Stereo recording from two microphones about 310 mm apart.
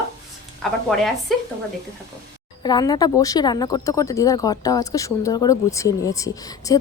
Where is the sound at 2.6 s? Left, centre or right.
Centre.